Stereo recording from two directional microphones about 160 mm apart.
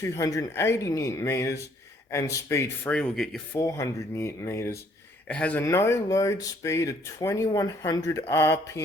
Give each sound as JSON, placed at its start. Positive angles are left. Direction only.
{"t": 0.0, "sound": "speech", "side_deg": 20}
{"t": 3.5, "sound": "speech", "side_deg": 20}